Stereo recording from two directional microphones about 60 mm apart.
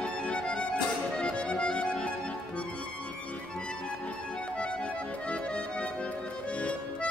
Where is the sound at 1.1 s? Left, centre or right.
Centre.